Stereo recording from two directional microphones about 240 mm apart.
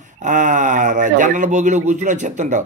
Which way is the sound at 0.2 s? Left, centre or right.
Right.